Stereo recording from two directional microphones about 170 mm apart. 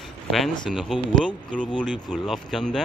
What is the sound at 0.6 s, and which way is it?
Speech, centre (ahead or behind).